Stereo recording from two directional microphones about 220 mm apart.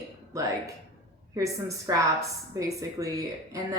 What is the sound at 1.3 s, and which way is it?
A woman's voice, 15° right (ahead or behind).